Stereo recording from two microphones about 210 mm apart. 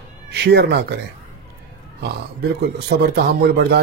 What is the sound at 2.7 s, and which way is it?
Speech, 50° right (ahead or behind).